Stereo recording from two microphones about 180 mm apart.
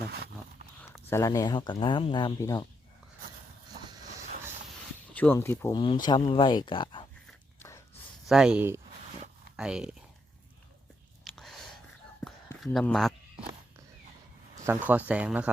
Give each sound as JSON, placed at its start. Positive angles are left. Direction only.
{"t": 1.1, "sound": "speech", "side_deg": 15}
{"t": 5.1, "sound": "speech", "side_deg": 10}
{"t": 5.7, "sound": "speech", "side_deg": 25}
{"t": 8.3, "sound": "speech", "side_deg": -5}
{"t": 11.2, "sound": "a sound", "side_deg": 0}
{"t": 12.5, "sound": "speech", "side_deg": 0}
{"t": 13.3, "sound": "a sound", "side_deg": -30}
{"t": 14.5, "sound": "speech", "side_deg": -15}